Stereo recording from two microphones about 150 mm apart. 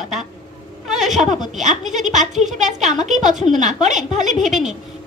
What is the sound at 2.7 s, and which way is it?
Speech, 50° right (ahead or behind).